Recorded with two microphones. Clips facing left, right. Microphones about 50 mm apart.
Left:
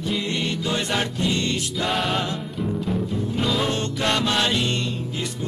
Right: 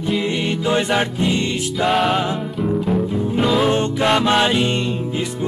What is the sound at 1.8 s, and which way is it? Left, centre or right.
Music, centre.